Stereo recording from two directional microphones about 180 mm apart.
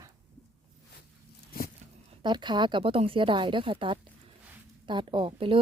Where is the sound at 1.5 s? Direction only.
55° left (ahead or behind).